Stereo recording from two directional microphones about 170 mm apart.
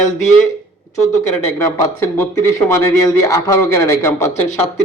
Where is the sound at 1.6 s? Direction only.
15° left (ahead or behind).